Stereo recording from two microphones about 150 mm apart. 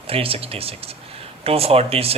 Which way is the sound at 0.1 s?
40° right (ahead or behind).